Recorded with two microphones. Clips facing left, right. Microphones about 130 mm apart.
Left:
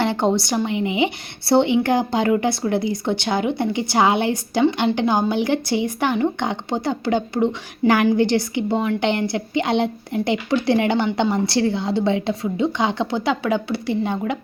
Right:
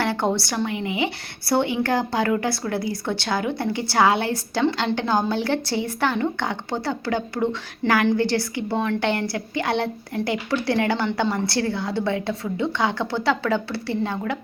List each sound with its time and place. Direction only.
0.0 s a woman's voice: 20° left (ahead or behind)